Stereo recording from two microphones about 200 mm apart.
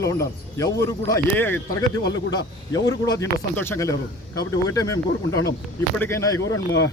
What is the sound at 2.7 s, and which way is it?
Speech, 15° left (ahead or behind).